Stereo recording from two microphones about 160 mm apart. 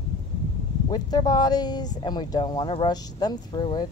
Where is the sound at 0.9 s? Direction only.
25° left (ahead or behind).